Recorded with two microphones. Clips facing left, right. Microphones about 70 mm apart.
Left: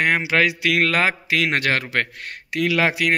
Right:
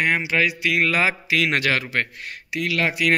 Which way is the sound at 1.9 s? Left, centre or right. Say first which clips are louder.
Left 1 dB; left.